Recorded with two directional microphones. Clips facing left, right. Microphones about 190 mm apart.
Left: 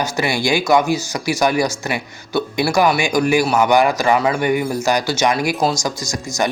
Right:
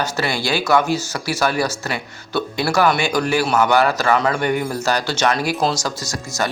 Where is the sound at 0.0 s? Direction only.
15° left (ahead or behind).